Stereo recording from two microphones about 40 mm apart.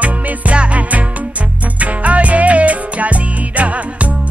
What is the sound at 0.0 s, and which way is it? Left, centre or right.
Music, right.